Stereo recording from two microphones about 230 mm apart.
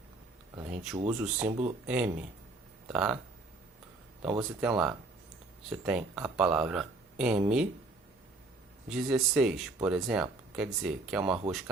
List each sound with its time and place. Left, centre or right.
1.0 s speech: centre
1.5 s speech: right
1.9 s speech: centre
4.4 s speech: centre
8.9 s speech: centre